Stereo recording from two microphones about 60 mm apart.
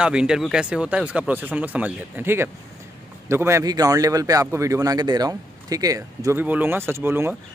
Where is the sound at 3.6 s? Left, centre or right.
Right.